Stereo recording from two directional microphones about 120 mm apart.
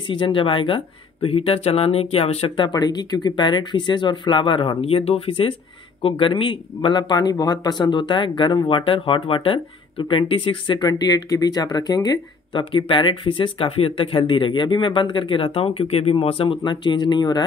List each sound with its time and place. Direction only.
0.1 s speech: 45° left (ahead or behind)